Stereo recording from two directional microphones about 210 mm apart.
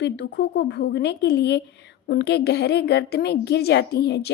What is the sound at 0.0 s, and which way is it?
Speech, 55° left (ahead or behind).